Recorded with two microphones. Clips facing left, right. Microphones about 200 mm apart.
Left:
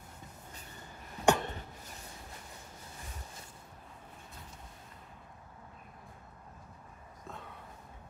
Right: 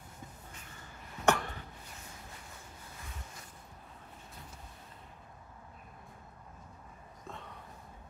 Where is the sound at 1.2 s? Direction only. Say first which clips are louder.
Left 2 dB; 20° left (ahead or behind).